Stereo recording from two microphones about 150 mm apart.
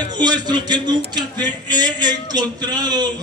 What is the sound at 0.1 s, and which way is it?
Speech, 30° right (ahead or behind).